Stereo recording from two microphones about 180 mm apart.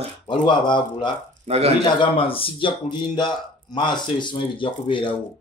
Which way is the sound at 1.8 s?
30° left (ahead or behind).